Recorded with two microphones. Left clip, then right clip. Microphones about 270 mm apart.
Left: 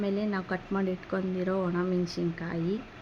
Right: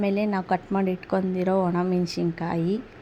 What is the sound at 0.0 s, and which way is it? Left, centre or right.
Speech, right.